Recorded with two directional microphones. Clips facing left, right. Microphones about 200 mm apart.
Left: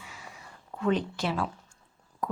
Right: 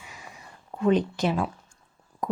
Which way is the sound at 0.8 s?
20° right (ahead or behind).